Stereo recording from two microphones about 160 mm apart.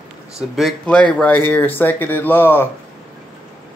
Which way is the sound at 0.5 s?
5° left (ahead or behind).